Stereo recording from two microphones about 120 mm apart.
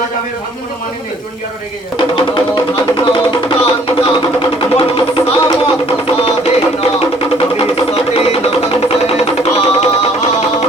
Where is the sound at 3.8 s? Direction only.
45° left (ahead or behind).